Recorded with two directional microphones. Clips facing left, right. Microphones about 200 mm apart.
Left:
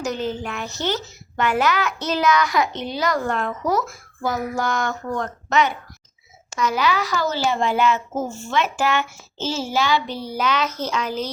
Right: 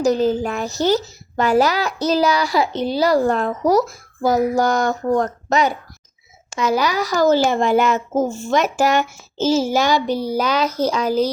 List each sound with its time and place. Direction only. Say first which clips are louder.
0.0 s a child's voice: right 9 dB; 35° right (ahead or behind)